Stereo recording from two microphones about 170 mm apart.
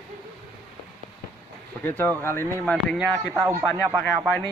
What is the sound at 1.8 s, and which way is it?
Speech, 10° left (ahead or behind).